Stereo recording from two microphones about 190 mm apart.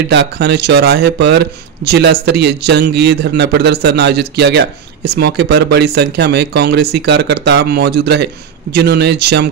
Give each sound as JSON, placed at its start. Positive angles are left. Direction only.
{"t": 0.1, "sound": "speech", "side_deg": -60}